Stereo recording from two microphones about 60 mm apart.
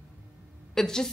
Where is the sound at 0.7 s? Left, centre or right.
Centre.